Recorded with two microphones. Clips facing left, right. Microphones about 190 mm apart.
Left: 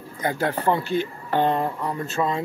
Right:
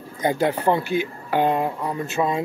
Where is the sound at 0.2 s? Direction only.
20° right (ahead or behind).